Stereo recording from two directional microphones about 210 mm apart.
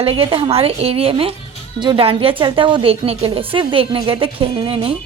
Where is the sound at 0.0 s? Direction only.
25° right (ahead or behind).